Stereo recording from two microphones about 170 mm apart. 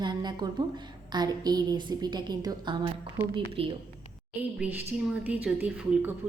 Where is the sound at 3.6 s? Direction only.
35° right (ahead or behind).